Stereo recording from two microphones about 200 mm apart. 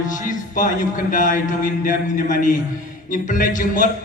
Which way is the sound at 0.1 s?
40° left (ahead or behind).